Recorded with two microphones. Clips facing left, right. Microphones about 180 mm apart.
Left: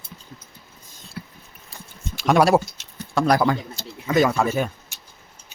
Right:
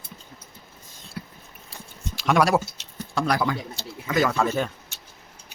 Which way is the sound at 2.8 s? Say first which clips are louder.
Left 5 dB; 45° left (ahead or behind).